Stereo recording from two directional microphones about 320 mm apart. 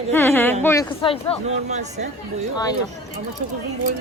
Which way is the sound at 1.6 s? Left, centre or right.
Right.